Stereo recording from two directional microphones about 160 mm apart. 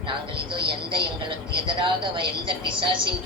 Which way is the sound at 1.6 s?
30° right (ahead or behind).